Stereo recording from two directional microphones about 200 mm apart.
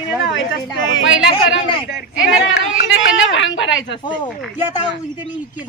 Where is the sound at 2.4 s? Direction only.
70° left (ahead or behind).